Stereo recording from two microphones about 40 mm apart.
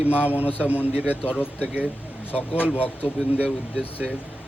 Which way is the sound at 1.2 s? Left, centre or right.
Left.